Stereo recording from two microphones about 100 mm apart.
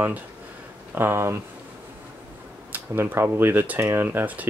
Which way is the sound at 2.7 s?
20° right (ahead or behind).